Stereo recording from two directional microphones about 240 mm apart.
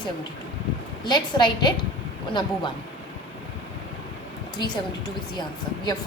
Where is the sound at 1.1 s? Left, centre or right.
Centre.